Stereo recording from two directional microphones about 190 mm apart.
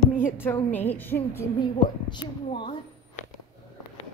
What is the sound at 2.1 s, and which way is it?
Speech, 25° left (ahead or behind).